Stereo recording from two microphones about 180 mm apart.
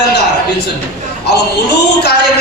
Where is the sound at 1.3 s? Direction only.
65° left (ahead or behind).